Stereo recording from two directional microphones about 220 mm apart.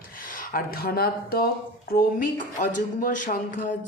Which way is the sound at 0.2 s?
40° left (ahead or behind).